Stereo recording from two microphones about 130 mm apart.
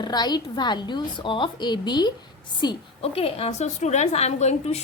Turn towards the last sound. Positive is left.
turn(degrees=55)  # may be behind; listen again after turning